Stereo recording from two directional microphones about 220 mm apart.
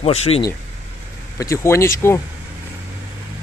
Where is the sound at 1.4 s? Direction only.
15° left (ahead or behind).